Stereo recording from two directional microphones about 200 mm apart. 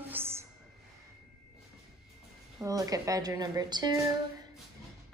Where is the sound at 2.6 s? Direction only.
15° right (ahead or behind).